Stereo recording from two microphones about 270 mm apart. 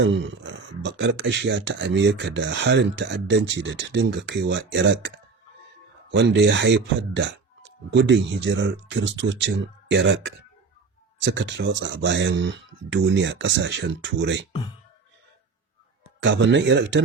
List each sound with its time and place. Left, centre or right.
0.0 s speech: right
16.2 s speech: right